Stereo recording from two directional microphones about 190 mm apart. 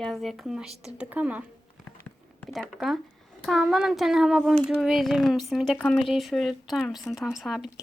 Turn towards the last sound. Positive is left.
turn(degrees=0)  # may be behind; listen again after turning